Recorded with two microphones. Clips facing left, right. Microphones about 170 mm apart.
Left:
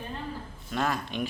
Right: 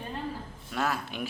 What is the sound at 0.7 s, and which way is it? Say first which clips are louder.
Speech: left 2 dB; 5° right (ahead or behind).